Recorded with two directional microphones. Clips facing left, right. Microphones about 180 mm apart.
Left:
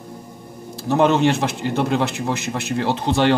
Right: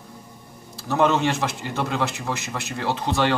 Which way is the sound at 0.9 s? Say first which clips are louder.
Left 4 dB; 25° left (ahead or behind).